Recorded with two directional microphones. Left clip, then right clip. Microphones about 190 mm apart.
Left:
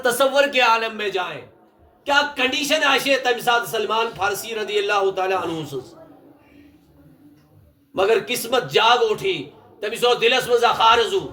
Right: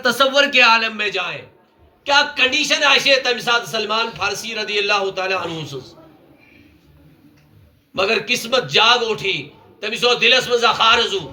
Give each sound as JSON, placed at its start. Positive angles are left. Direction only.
{"t": 0.0, "sound": "speech", "side_deg": 25}
{"t": 7.9, "sound": "speech", "side_deg": 20}